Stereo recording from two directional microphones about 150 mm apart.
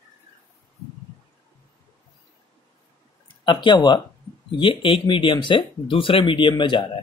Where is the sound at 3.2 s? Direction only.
30° left (ahead or behind).